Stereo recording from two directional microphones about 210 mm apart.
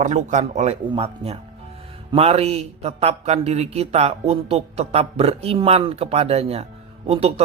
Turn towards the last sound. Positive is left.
turn(degrees=-30)  # may be behind; listen again after turning